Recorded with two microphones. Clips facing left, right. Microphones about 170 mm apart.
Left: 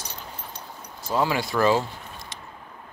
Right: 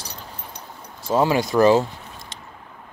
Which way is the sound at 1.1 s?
25° right (ahead or behind).